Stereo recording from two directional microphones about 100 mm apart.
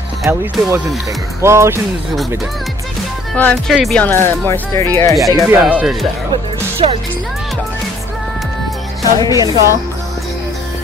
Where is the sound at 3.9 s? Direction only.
20° left (ahead or behind).